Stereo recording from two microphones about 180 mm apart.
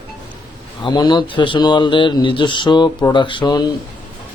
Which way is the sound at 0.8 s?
25° left (ahead or behind).